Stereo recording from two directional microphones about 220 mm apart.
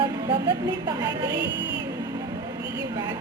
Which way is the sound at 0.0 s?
20° right (ahead or behind).